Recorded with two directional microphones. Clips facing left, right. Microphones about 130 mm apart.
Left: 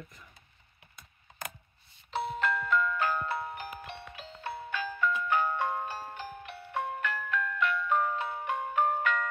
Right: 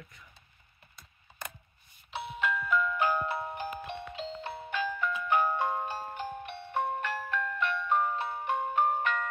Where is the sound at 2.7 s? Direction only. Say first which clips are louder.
Right 2 dB; 15° right (ahead or behind).